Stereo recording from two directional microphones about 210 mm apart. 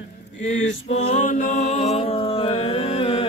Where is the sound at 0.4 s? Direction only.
35° left (ahead or behind).